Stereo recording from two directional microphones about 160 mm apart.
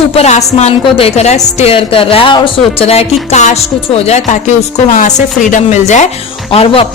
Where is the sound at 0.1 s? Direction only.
40° left (ahead or behind).